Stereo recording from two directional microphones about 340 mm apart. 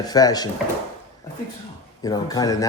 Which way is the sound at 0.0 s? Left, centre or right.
Centre.